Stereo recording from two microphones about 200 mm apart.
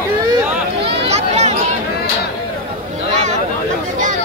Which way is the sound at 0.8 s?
30° right (ahead or behind).